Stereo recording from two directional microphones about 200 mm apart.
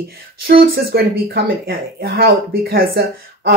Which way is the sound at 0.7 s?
50° right (ahead or behind).